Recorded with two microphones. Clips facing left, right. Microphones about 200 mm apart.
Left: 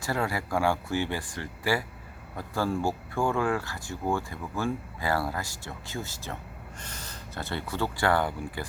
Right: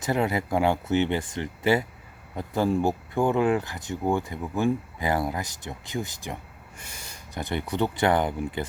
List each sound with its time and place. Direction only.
0.0 s speech: 20° right (ahead or behind)